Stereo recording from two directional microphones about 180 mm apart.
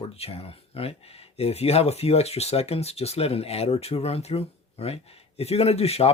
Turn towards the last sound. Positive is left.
turn(degrees=35)  # may be behind; listen again after turning